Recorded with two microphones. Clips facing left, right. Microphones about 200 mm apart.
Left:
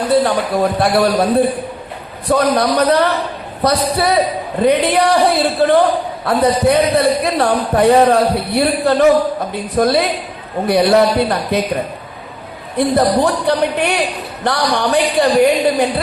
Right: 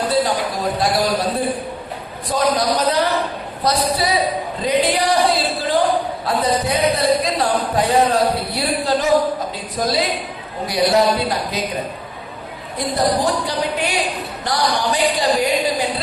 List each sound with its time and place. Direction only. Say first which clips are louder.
0.1 s speech: left 9 dB; 60° left (ahead or behind)
2.2 s a man's voice: left 5 dB; 60° left (ahead or behind)
12.7 s a man's voice: left 6 dB; 60° left (ahead or behind)